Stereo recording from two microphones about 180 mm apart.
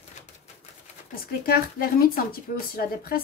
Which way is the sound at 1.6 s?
55° left (ahead or behind).